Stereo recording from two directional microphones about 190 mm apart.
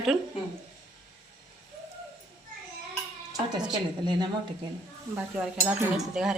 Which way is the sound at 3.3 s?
20° right (ahead or behind).